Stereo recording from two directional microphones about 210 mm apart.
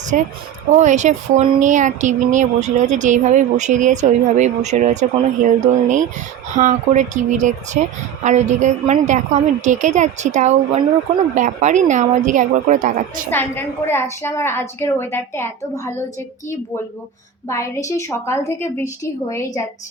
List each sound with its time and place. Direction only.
0.1 s speech: 40° right (ahead or behind)
13.3 s a woman's voice: 10° left (ahead or behind)
17.5 s a woman's voice: 15° left (ahead or behind)